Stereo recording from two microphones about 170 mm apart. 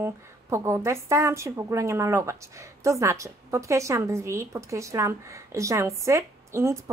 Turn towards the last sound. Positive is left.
turn(degrees=-15)  # may be behind; listen again after turning